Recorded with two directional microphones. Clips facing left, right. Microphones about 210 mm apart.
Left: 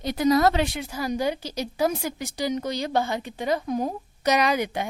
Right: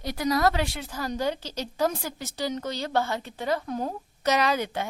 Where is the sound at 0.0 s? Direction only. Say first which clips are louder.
Left 4 dB; 20° left (ahead or behind).